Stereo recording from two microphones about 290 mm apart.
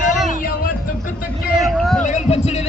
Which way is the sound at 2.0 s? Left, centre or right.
Left.